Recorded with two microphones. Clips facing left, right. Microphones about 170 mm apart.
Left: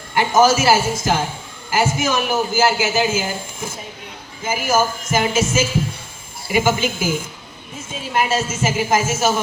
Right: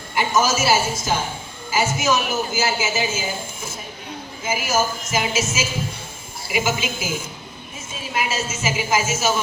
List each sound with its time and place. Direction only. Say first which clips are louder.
0.1 s a man's voice: left 5 dB; 55° left (ahead or behind)
6.5 s speech: left 5 dB; 55° left (ahead or behind)
8.1 s speech: left 5 dB; 55° left (ahead or behind)